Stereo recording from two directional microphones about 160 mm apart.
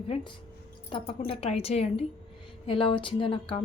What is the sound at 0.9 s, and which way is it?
A woman's voice, 35° left (ahead or behind).